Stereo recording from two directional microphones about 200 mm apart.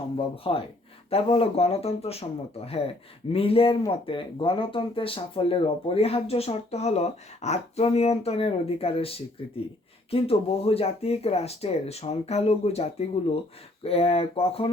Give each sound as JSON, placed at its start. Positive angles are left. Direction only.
{"t": 0.4, "sound": "speech", "side_deg": 25}